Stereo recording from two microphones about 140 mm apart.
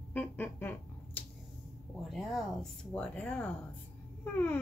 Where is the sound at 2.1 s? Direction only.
Centre (ahead or behind).